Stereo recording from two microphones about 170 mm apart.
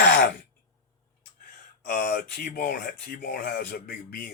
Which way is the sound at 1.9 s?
55° left (ahead or behind).